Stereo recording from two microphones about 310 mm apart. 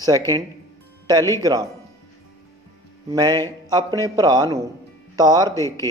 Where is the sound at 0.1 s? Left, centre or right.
Centre.